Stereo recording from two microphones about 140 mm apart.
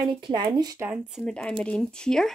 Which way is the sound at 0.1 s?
35° right (ahead or behind).